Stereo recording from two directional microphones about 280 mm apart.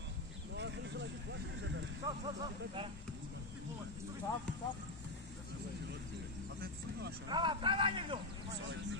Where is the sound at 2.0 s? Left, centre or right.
Centre.